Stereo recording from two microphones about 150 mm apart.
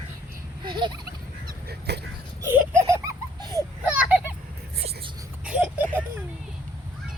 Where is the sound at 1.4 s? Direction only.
90° right.